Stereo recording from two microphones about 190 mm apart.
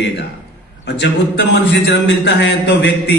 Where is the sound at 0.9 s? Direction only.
65° left (ahead or behind).